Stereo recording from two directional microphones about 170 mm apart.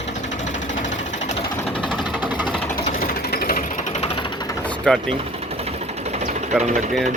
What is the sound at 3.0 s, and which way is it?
Jackhammer, 65° left (ahead or behind).